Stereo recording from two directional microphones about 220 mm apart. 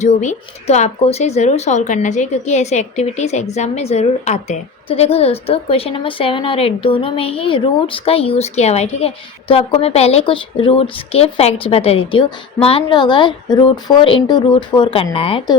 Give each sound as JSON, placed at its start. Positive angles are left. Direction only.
{"t": 0.0, "sound": "a woman's voice", "side_deg": 30}